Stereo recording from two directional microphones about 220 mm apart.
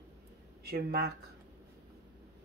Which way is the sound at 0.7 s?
45° right (ahead or behind).